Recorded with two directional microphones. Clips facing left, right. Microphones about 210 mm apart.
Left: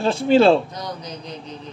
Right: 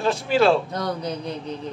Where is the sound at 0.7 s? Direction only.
60° right (ahead or behind).